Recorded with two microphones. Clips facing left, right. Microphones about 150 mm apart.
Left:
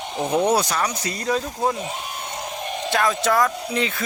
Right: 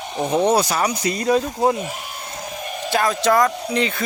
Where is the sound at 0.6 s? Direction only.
10° right (ahead or behind).